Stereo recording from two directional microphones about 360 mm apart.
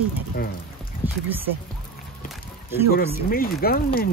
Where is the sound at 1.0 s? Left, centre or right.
Centre.